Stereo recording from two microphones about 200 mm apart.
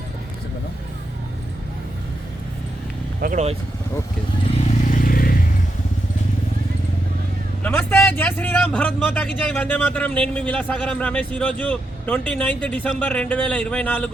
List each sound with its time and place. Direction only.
3.2 s speech: 40° right (ahead or behind)
4.8 s vehicle: 40° left (ahead or behind)
7.6 s a man's voice: 5° left (ahead or behind)